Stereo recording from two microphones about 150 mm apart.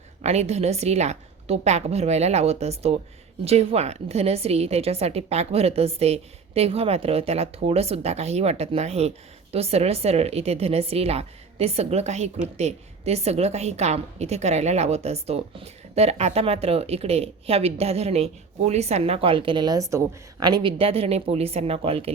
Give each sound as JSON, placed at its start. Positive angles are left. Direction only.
{"t": 0.2, "sound": "a woman's voice", "side_deg": -45}